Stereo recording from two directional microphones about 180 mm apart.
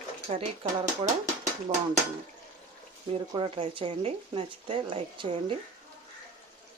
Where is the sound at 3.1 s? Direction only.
30° right (ahead or behind).